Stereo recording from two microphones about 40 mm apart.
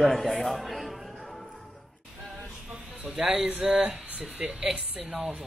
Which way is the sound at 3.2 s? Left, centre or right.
Centre.